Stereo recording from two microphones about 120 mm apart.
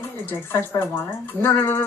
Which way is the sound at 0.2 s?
20° left (ahead or behind).